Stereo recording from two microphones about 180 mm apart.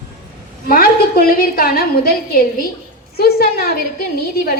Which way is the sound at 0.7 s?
55° left (ahead or behind).